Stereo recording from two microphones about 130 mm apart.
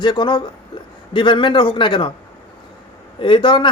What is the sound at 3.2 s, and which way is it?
Speech, 40° left (ahead or behind).